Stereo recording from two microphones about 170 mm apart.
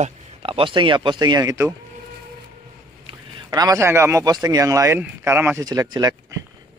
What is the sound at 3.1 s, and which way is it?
Speech, 25° right (ahead or behind).